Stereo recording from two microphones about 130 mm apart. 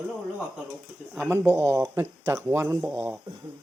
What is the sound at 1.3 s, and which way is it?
A man's voice, 20° right (ahead or behind).